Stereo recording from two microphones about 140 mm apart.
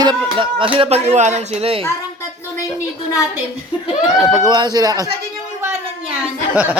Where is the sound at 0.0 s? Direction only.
35° right (ahead or behind).